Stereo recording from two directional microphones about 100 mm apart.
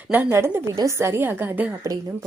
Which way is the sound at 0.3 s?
25° right (ahead or behind).